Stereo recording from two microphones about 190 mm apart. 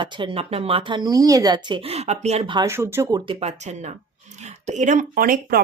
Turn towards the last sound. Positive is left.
turn(degrees=-50)  # may be behind; listen again after turning